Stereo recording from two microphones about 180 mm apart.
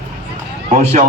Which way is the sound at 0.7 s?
40° right (ahead or behind).